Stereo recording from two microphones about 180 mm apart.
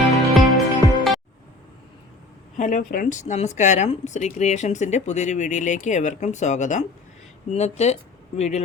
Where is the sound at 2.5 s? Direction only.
45° left (ahead or behind).